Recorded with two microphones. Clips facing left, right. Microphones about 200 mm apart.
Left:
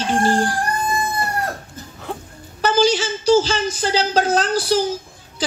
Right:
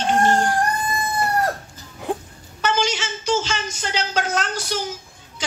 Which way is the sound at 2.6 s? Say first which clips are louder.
Left 6 dB; 35° left (ahead or behind).